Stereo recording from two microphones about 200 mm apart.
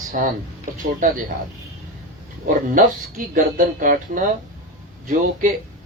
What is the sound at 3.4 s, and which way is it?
Speech, 40° right (ahead or behind).